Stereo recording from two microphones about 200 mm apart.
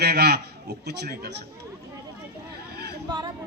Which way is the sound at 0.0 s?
55° right (ahead or behind).